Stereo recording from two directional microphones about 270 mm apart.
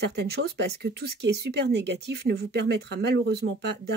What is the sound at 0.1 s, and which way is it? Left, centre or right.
Speech, right.